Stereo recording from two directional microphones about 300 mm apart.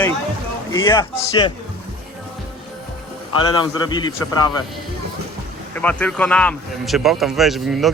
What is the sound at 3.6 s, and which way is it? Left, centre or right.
Speech, centre.